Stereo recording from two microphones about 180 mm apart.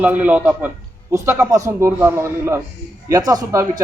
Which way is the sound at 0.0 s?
10° right (ahead or behind).